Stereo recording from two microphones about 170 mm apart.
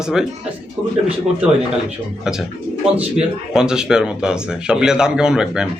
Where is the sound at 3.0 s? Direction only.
5° right (ahead or behind).